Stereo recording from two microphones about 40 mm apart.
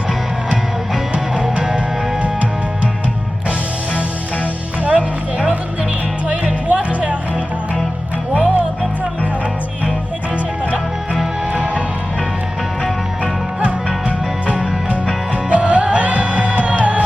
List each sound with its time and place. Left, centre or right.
0.1 s music: centre
2.1 s music: right
4.8 s music: right
6.7 s music: right
8.3 s music: right
11.5 s music: right
14.4 s music: right